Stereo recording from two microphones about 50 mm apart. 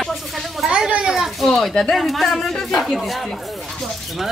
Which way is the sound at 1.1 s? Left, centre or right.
Centre.